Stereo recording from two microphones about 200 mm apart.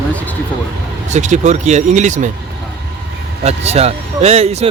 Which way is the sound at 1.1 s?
35° right (ahead or behind).